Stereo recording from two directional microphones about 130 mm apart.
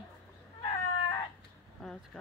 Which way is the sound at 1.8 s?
5° left (ahead or behind).